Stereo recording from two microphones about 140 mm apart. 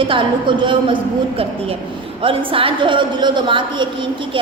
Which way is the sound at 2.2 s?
40° right (ahead or behind).